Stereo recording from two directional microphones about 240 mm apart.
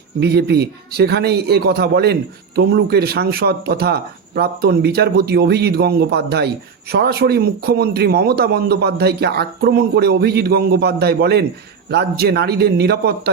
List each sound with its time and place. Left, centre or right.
0.2 s a man's voice: right